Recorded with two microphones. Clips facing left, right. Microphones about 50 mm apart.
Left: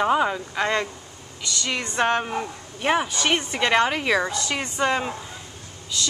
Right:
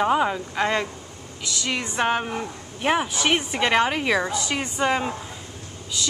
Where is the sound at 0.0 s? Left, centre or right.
Centre.